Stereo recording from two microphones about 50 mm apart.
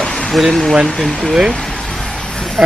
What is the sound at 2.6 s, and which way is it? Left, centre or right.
Speech, centre.